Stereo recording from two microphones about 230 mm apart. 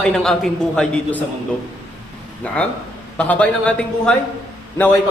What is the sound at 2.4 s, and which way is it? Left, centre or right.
A man's voice, centre.